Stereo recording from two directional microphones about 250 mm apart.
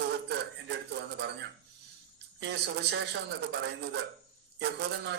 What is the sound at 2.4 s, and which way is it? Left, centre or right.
Speech, right.